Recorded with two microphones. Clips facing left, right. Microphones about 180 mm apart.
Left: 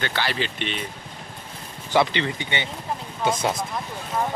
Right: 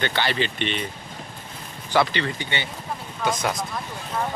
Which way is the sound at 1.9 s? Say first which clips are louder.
Left 1 dB; 20° left (ahead or behind).